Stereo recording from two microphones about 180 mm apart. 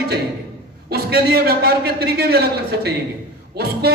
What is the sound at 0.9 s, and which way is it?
A man's voice, 60° right (ahead or behind).